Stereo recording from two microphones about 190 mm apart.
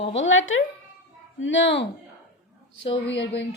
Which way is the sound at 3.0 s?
70° left (ahead or behind).